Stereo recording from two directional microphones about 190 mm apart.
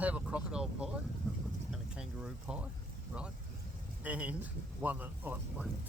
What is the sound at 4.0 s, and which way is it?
Speech, 5° right (ahead or behind).